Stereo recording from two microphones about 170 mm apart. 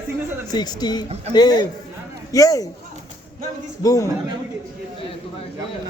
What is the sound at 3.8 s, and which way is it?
Speech, 20° left (ahead or behind).